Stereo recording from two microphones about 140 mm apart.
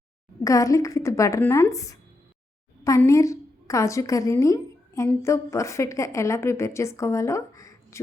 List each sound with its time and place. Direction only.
0.4 s a woman's voice: 25° left (ahead or behind)
3.1 s a woman's voice: 25° left (ahead or behind)